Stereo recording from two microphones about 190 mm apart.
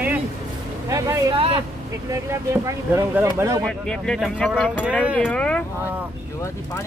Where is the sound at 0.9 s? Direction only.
15° right (ahead or behind).